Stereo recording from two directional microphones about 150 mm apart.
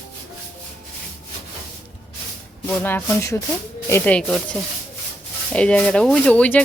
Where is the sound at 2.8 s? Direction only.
15° left (ahead or behind).